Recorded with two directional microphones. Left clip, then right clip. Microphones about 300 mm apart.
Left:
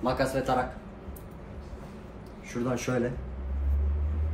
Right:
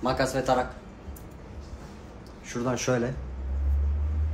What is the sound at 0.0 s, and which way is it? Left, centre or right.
Speech, centre.